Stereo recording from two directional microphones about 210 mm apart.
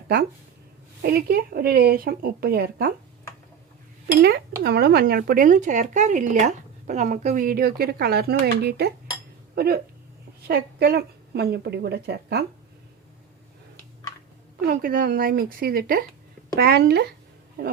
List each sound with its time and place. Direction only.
1.0 s speech: 45° right (ahead or behind)
4.2 s a woman's voice: 50° right (ahead or behind)
14.7 s speech: 40° right (ahead or behind)